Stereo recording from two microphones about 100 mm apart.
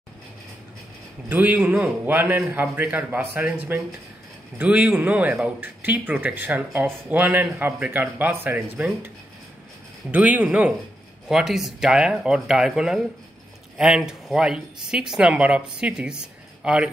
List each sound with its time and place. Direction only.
1.3 s speech: 15° right (ahead or behind)
10.1 s speech: 15° right (ahead or behind)